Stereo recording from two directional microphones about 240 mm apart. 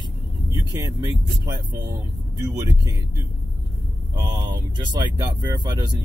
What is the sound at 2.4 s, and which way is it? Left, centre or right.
Speech, centre.